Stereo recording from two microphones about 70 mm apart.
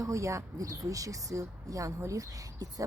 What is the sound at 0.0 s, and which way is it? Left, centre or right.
Speech, right.